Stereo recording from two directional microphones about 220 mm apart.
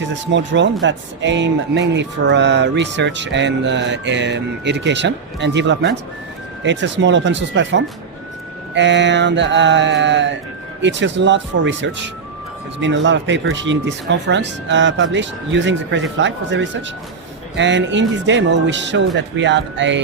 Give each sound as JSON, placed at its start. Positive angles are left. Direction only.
{"t": 0.3, "sound": "speech", "side_deg": -55}